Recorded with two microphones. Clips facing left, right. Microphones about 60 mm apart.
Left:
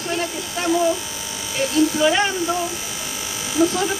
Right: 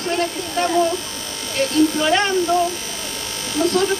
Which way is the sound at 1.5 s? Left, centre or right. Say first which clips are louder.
Right 2 dB; centre.